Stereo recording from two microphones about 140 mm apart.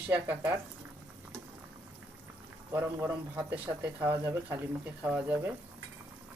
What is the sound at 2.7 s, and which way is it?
Speech, 15° right (ahead or behind).